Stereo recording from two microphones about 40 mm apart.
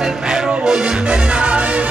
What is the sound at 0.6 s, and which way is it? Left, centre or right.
Music, centre.